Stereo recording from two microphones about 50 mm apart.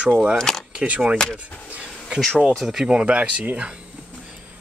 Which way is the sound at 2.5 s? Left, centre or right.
Centre.